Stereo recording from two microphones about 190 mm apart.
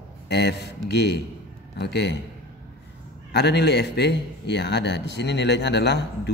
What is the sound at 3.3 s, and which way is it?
A man's voice, 60° left (ahead or behind).